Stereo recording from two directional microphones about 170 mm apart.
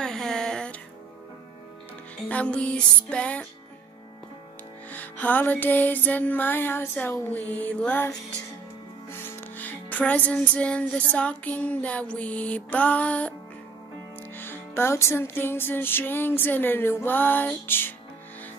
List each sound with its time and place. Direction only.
0.0 s a sound: 5° left (ahead or behind)
2.2 s music: 5° left (ahead or behind)
4.9 s music: 10° left (ahead or behind)
9.1 s music: 10° left (ahead or behind)
14.3 s music: 10° left (ahead or behind)